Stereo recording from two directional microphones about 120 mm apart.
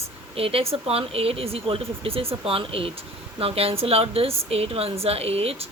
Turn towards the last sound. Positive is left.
turn(degrees=-55)  # may be behind; listen again after turning